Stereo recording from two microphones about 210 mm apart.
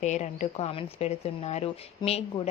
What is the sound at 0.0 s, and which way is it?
A woman's voice, 35° left (ahead or behind).